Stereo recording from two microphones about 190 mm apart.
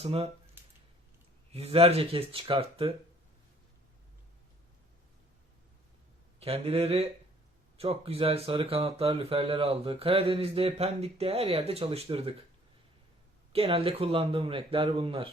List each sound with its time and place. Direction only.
0.0 s speech: 30° right (ahead or behind)
1.5 s speech: 30° right (ahead or behind)
6.4 s speech: 30° right (ahead or behind)
13.5 s speech: 30° right (ahead or behind)